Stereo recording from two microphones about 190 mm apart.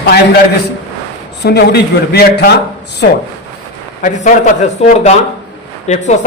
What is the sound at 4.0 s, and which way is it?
A man's voice, 40° left (ahead or behind).